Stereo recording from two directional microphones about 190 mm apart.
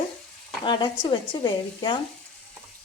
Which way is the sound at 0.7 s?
25° left (ahead or behind).